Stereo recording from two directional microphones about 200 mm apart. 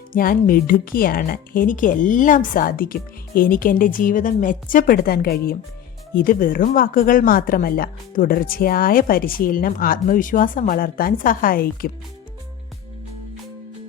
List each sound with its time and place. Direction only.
0.1 s speech: 45° left (ahead or behind)